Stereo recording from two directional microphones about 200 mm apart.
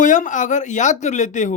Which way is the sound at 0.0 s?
40° left (ahead or behind).